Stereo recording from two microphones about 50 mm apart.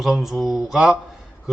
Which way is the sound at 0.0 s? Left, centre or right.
Centre.